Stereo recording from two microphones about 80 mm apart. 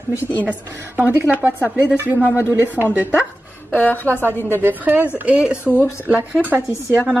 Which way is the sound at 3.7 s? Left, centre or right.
Left.